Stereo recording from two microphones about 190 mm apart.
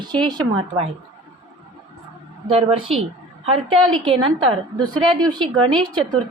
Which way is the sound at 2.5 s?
30° right (ahead or behind).